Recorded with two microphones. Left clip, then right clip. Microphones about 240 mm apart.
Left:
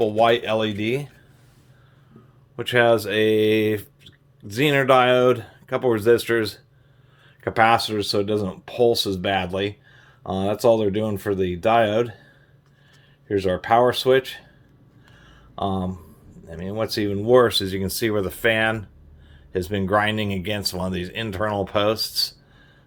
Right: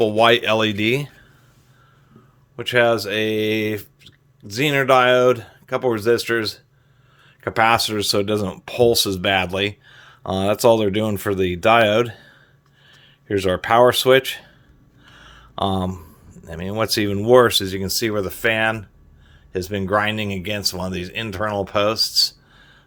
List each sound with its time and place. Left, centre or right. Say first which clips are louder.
0.0 s speech: right 3 dB; right
2.6 s speech: right 1 dB; centre
7.4 s speech: right 1 dB; centre